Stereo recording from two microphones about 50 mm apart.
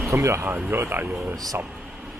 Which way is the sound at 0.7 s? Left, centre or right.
Right.